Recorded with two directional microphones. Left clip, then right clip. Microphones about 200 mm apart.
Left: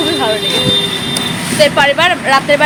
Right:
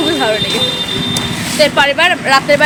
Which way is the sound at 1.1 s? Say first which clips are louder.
Left 1 dB; 5° right (ahead or behind).